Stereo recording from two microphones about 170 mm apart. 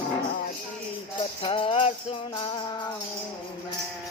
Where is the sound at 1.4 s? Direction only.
30° left (ahead or behind).